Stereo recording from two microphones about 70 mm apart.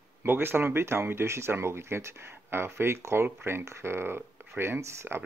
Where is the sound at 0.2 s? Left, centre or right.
Right.